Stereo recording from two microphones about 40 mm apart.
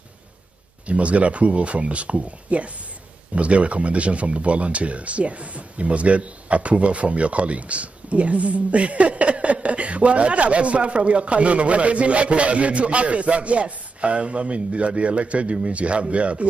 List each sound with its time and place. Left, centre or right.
0.8 s speech: right